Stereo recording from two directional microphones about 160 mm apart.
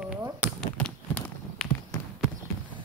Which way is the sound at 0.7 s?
10° left (ahead or behind).